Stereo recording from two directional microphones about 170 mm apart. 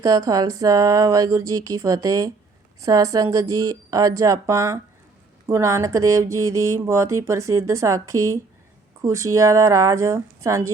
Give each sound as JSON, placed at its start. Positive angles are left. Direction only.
{"t": 0.0, "sound": "speech", "side_deg": -20}